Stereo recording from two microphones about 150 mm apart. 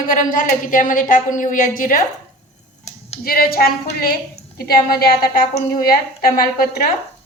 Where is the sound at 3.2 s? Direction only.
80° left.